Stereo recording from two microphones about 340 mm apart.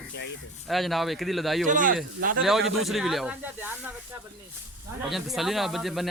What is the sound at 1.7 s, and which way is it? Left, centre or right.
Speech, right.